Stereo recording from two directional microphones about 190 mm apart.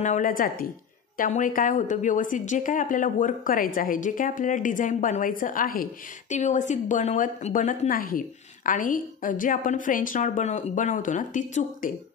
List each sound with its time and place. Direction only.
0.0 s a woman's voice: 45° left (ahead or behind)